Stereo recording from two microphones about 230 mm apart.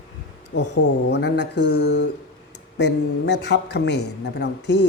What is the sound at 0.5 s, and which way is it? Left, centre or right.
Speech, left.